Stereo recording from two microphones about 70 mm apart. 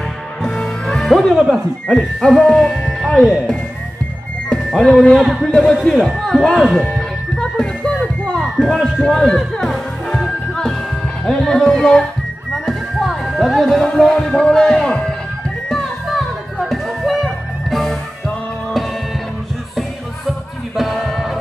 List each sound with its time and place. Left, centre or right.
0.4 s music: centre
1.9 s speech: centre
4.5 s speech: centre
7.0 s music: centre
8.5 s speech: centre
8.8 s music: centre
12.5 s speech: centre
15.7 s music: centre